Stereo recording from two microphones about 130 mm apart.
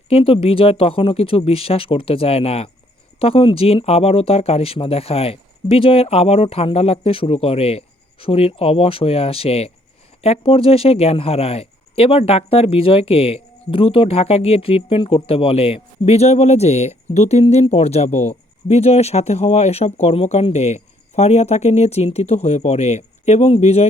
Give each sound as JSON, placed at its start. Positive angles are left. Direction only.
{"t": 0.1, "sound": "speech", "side_deg": 45}